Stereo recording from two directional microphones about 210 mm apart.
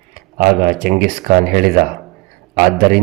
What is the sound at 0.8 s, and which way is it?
A man's voice, 45° right (ahead or behind).